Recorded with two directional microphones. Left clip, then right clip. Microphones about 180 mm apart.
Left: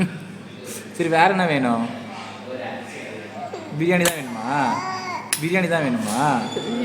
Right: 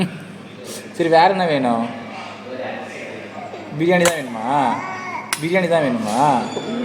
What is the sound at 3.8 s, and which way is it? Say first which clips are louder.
A man's voice: right 4 dB; 15° left (ahead or behind).